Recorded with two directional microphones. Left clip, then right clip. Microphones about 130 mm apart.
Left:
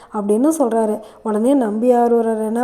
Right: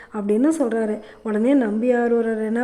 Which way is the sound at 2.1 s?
40° right (ahead or behind).